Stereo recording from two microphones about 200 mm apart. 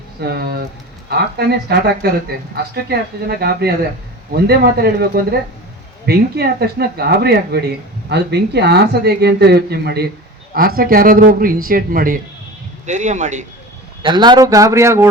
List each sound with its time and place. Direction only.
0.2 s speech: 50° right (ahead or behind)
14.0 s a man's voice: 25° right (ahead or behind)